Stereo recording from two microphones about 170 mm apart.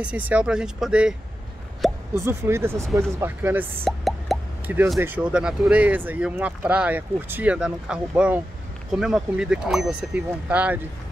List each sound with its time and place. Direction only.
0.0 s speech: 5° right (ahead or behind)
1.8 s a sound: centre (ahead or behind)
2.1 s speech: 15° right (ahead or behind)
3.8 s plop: centre (ahead or behind)
4.7 s speech: centre (ahead or behind)